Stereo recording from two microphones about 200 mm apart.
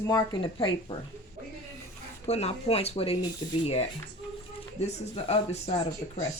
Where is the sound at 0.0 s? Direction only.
20° left (ahead or behind).